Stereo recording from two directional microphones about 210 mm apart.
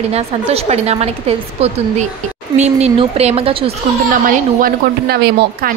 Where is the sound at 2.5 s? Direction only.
30° right (ahead or behind).